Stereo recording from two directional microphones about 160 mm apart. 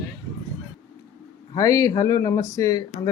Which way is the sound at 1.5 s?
20° left (ahead or behind).